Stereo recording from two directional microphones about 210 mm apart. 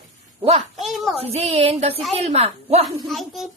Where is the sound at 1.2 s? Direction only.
30° right (ahead or behind).